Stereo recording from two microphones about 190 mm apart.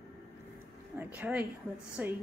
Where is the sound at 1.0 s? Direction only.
5° right (ahead or behind).